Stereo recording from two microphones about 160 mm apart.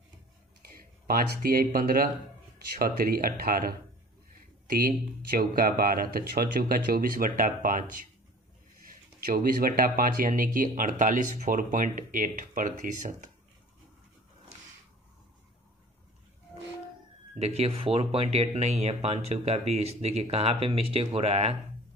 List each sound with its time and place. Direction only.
0.6 s speech: 70° right (ahead or behind)
17.4 s speech: 40° right (ahead or behind)